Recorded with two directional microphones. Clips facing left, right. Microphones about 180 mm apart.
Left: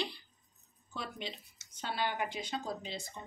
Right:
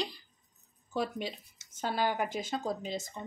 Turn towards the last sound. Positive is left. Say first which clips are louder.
# right 5 dB
turn(degrees=-45)  # may be behind; listen again after turning